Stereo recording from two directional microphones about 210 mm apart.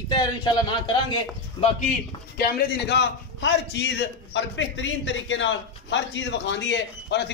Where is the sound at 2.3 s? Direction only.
50° left (ahead or behind).